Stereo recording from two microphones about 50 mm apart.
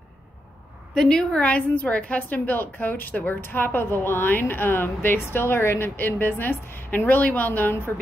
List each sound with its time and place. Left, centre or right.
0.9 s a woman's voice: centre
1.4 s a woman's voice: left